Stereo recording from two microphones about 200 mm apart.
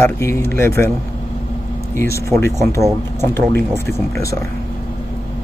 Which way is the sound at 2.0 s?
15° left (ahead or behind).